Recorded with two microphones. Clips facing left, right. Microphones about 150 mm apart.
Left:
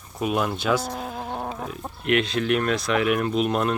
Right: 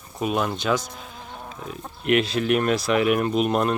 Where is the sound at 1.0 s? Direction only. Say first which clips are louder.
Left 9 dB; 55° left (ahead or behind).